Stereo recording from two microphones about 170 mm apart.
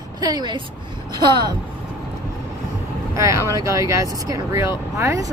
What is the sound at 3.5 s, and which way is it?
Speech, 20° right (ahead or behind).